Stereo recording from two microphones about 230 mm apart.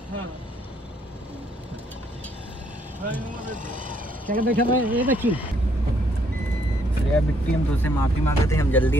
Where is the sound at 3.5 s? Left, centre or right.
Right.